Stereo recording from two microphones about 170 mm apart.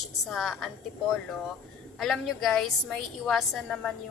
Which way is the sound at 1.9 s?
Centre (ahead or behind).